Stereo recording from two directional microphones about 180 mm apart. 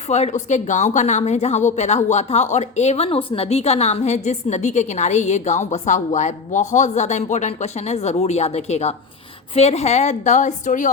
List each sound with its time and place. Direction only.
0.1 s a woman's voice: 40° left (ahead or behind)